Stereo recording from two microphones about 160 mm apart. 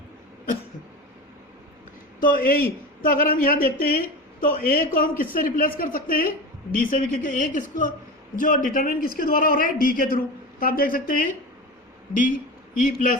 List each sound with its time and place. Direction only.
2.2 s a man's voice: 60° left (ahead or behind)